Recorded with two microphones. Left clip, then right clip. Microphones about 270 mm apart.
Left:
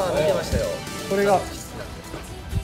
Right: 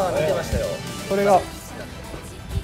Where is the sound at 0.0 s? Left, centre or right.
Centre.